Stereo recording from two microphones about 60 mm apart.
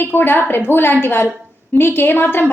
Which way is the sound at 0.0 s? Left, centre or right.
Left.